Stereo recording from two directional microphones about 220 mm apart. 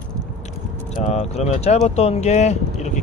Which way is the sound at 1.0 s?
30° left (ahead or behind).